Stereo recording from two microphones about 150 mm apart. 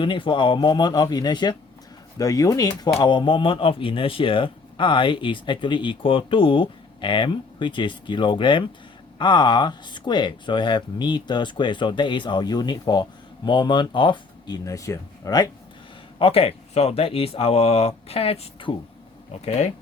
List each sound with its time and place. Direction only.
0.0 s speech: 35° left (ahead or behind)
16.1 s speech: 40° left (ahead or behind)